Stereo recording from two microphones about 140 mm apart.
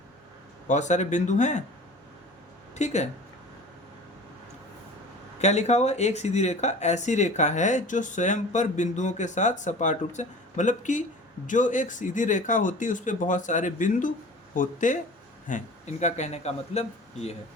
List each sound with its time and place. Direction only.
0.7 s speech: 60° left (ahead or behind)
2.7 s speech: 55° left (ahead or behind)
5.4 s speech: 55° left (ahead or behind)